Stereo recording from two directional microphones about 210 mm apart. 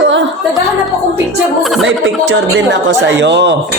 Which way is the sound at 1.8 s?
60° right (ahead or behind).